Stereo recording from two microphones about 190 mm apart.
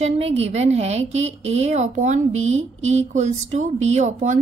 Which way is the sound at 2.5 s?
90° right.